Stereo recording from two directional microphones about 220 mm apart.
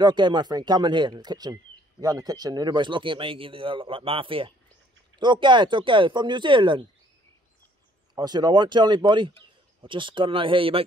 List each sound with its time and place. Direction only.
0.0 s speech: 20° right (ahead or behind)
8.1 s speech: 20° right (ahead or behind)